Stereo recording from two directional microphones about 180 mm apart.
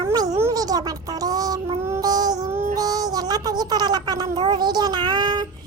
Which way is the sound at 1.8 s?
15° right (ahead or behind).